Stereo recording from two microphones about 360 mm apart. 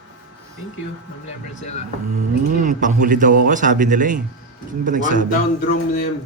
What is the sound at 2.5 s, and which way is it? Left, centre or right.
A man's voice, right.